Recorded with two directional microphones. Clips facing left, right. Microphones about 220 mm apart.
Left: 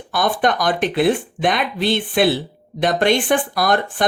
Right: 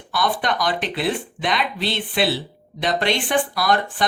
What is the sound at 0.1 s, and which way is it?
Speech, 50° left (ahead or behind).